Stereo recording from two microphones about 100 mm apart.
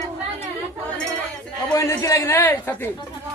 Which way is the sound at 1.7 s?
30° left (ahead or behind).